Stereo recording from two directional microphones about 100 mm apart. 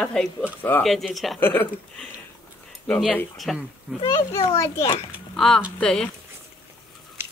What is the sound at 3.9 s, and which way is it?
Speech, 15° right (ahead or behind).